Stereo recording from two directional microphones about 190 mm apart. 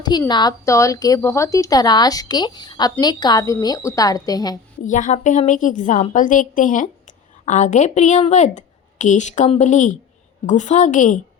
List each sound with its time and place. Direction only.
0.0 s a woman's voice: 20° left (ahead or behind)
4.8 s a woman's voice: 40° left (ahead or behind)